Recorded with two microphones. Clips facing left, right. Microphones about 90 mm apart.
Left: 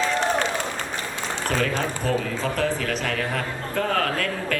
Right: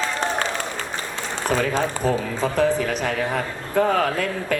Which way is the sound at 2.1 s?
15° right (ahead or behind).